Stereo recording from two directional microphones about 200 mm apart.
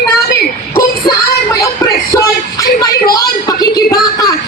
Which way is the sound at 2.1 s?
15° left (ahead or behind).